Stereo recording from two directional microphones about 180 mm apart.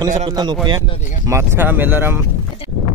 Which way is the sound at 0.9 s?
40° left (ahead or behind).